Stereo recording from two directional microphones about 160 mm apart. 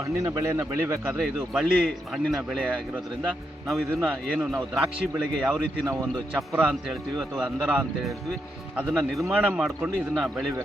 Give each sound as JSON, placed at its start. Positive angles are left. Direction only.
{"t": 0.0, "sound": "speech", "side_deg": -20}
{"t": 1.2, "sound": "a man's voice", "side_deg": 0}
{"t": 5.8, "sound": "speech", "side_deg": -20}
{"t": 6.5, "sound": "a man's voice", "side_deg": -10}